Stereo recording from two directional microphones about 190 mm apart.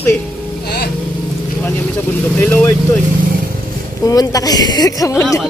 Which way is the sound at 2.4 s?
10° left (ahead or behind).